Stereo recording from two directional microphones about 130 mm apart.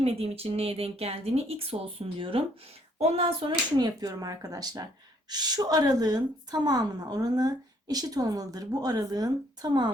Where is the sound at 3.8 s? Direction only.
30° right (ahead or behind).